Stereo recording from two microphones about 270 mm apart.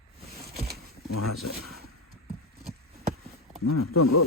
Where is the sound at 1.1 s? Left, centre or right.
Left.